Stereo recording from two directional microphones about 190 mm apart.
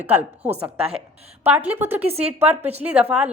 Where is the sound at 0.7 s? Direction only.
30° right (ahead or behind).